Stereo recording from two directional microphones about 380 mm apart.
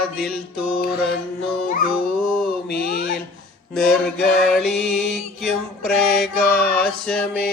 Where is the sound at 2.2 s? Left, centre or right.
Centre.